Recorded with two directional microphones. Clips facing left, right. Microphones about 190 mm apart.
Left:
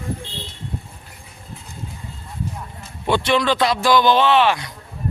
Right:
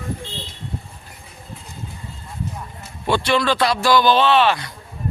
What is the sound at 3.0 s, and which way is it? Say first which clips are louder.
Speech: left 1 dB; 20° left (ahead or behind).